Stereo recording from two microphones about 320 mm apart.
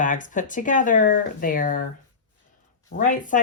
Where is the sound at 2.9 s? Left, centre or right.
Left.